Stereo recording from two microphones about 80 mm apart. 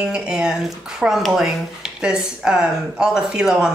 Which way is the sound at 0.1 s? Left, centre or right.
Centre.